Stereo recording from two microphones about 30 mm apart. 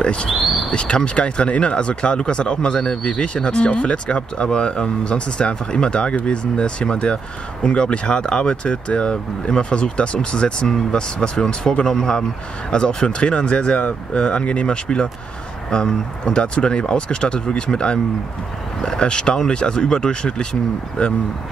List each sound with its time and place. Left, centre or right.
0.0 s speech: left
12.0 s speech: left
18.8 s speech: left